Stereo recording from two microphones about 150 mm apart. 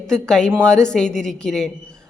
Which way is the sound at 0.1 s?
5° left (ahead or behind).